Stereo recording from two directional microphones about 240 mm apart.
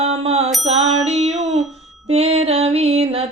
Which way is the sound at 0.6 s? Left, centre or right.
Right.